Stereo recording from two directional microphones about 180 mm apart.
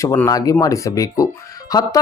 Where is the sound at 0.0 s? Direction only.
15° left (ahead or behind).